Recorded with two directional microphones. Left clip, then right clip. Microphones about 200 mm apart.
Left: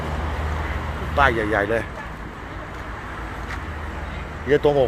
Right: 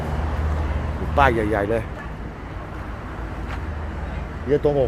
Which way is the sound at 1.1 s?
25° right (ahead or behind).